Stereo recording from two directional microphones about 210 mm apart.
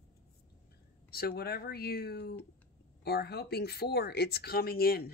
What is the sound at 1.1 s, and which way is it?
Speech, 45° left (ahead or behind).